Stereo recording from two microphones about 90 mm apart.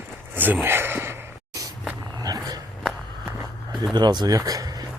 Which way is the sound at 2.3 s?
45° right (ahead or behind).